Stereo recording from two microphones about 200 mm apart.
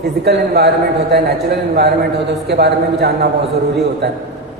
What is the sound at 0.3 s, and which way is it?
A man's voice, 55° right (ahead or behind).